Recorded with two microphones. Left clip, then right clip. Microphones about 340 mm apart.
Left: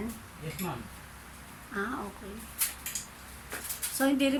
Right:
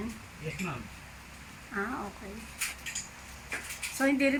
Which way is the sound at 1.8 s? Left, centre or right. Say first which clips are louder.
Even; centre.